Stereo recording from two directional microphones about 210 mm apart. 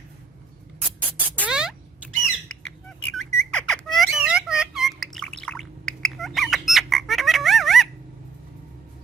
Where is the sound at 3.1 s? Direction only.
5° left (ahead or behind).